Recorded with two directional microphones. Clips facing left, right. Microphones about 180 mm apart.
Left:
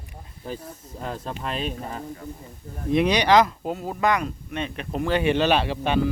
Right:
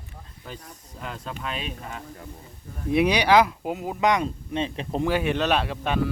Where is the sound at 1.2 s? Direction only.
35° left (ahead or behind).